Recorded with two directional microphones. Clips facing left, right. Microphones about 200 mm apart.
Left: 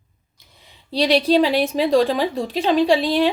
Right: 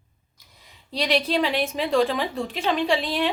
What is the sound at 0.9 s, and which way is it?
A woman's voice, 35° left (ahead or behind).